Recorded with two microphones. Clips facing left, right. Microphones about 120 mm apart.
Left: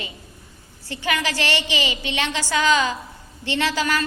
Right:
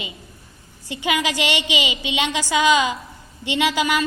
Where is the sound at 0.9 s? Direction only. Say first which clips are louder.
Right 2 dB; 15° right (ahead or behind).